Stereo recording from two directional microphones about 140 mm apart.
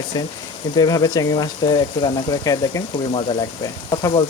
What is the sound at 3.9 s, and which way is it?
Speech, 30° left (ahead or behind).